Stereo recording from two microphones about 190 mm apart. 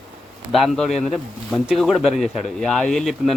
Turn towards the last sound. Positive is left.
turn(degrees=0)  # may be behind; listen again after turning